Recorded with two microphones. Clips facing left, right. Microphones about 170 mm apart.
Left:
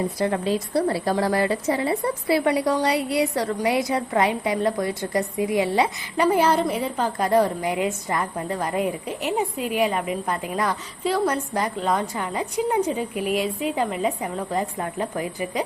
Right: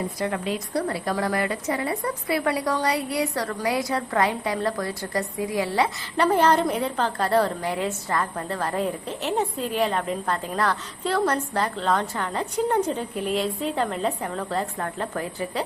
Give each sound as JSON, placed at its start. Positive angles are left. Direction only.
{"t": 0.2, "sound": "a woman's voice", "side_deg": 30}
{"t": 6.2, "sound": "a woman's voice", "side_deg": 10}